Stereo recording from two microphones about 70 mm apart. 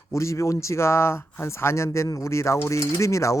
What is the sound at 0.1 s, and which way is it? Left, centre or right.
Speech, left.